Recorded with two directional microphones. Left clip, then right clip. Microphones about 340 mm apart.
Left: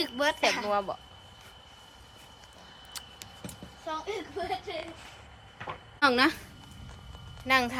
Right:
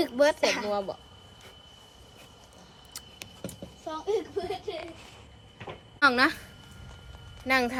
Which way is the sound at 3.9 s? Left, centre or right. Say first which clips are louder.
Right 2 dB; left.